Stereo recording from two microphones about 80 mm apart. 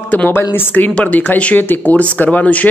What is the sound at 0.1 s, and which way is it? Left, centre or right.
Speech, left.